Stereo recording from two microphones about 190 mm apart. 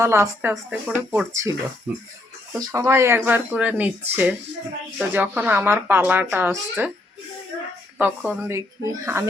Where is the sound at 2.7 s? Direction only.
15° right (ahead or behind).